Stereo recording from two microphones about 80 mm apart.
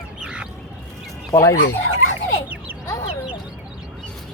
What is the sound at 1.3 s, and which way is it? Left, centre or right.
Speech, left.